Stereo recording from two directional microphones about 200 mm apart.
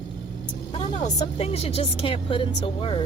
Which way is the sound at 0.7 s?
20° left (ahead or behind).